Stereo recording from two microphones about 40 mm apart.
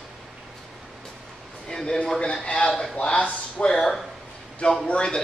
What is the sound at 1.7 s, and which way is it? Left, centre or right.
A man's voice, centre.